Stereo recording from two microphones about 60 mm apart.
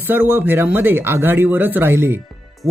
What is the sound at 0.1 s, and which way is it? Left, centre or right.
Speech, right.